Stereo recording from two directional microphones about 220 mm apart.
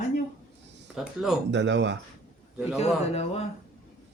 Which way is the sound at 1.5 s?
55° right (ahead or behind).